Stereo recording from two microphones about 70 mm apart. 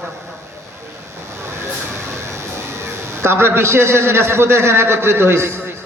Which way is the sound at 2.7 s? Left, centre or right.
Right.